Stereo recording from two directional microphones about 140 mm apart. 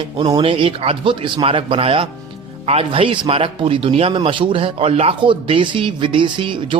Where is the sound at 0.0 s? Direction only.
35° right (ahead or behind).